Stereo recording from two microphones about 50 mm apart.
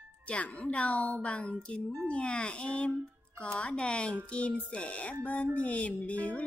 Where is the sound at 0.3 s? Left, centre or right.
Left.